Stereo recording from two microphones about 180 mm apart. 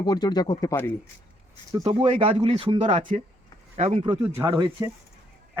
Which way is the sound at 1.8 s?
35° right (ahead or behind).